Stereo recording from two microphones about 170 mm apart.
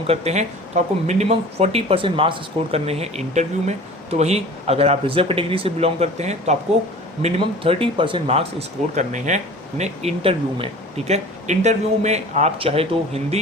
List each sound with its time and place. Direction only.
0.1 s speech: 40° right (ahead or behind)